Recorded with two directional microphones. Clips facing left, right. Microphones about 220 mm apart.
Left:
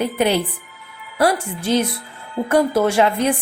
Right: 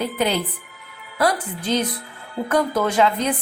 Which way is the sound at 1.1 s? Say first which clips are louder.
Left 3 dB; 30° left (ahead or behind).